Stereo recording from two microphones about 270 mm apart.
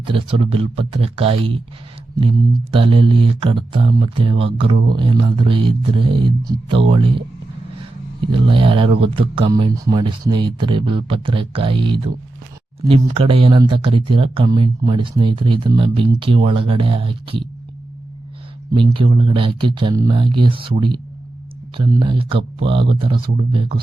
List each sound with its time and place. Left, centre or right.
0.0 s speech: centre
2.7 s speech: centre
8.3 s speech: centre
18.8 s speech: centre